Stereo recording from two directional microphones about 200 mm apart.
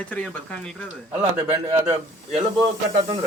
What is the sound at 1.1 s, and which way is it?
Speech, 10° right (ahead or behind).